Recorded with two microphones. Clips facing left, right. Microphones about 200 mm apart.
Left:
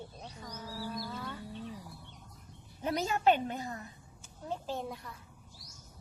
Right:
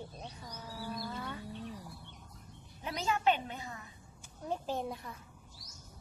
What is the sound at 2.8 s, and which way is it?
Speech, 40° left (ahead or behind).